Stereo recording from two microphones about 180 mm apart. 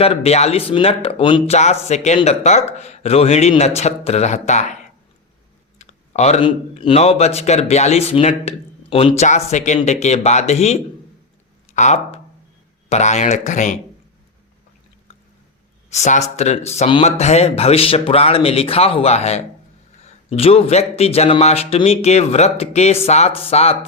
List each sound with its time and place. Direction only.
0.0 s speech: 35° left (ahead or behind)
5.8 s speech: 40° left (ahead or behind)
15.9 s speech: 40° left (ahead or behind)